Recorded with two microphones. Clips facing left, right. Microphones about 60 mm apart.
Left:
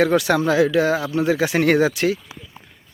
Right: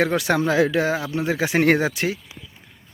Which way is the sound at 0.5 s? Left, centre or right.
Right.